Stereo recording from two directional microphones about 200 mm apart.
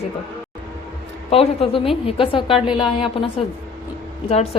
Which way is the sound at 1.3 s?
30° left (ahead or behind).